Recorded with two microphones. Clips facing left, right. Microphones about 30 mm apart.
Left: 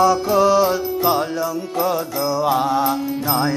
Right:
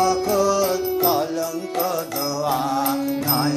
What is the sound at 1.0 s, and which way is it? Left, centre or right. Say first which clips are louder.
Music: left 1 dB; centre.